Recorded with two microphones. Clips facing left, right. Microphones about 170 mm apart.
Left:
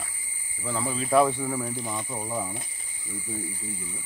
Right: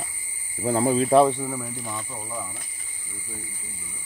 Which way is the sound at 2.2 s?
25° left (ahead or behind).